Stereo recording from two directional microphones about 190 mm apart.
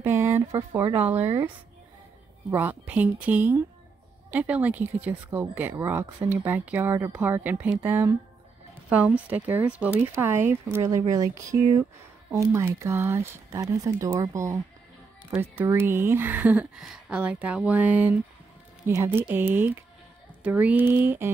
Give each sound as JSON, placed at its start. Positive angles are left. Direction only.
{"t": 0.0, "sound": "speech", "side_deg": -10}
{"t": 0.9, "sound": "speech", "side_deg": -10}
{"t": 2.5, "sound": "speech", "side_deg": -10}